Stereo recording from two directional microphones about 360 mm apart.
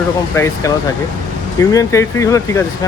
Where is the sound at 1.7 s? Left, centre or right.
Centre.